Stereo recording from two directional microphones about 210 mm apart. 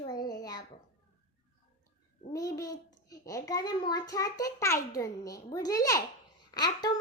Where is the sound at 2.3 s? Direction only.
15° left (ahead or behind).